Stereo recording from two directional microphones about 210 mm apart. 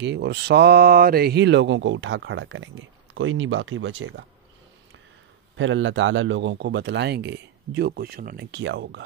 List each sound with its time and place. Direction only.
0.0 s speech: 55° right (ahead or behind)
5.6 s speech: 65° right (ahead or behind)